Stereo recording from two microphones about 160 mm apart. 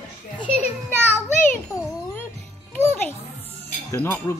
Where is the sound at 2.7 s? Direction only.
15° left (ahead or behind).